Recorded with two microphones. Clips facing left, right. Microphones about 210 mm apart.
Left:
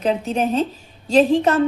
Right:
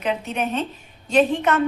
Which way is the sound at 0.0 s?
30° left (ahead or behind).